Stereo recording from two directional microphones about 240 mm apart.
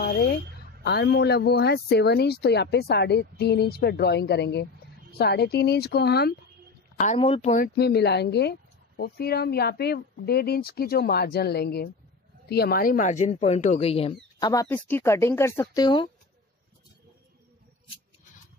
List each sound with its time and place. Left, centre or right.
0.8 s speech: left
7.0 s speech: left